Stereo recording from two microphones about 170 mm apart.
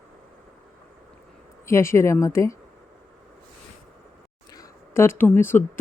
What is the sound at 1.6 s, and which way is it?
Speech, 15° left (ahead or behind).